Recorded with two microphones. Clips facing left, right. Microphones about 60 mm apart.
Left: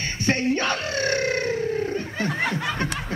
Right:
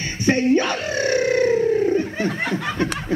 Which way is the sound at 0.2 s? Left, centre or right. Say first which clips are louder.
Right 6 dB; right.